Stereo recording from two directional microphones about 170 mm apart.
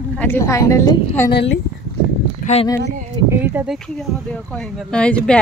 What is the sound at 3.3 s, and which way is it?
Speech, 10° right (ahead or behind).